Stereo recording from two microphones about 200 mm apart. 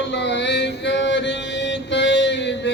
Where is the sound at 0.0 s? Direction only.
60° left (ahead or behind).